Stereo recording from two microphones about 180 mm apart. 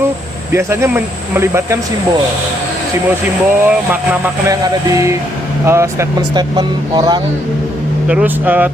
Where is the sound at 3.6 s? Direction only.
10° right (ahead or behind).